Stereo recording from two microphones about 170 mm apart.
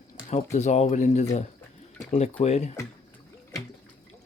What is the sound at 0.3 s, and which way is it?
Speech, 45° left (ahead or behind).